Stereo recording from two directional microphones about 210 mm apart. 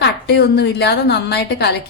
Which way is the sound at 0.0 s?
50° left (ahead or behind).